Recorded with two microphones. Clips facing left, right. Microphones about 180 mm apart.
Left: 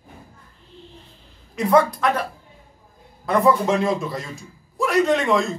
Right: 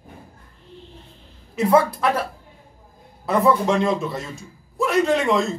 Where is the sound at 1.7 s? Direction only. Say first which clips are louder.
Even; 5° right (ahead or behind).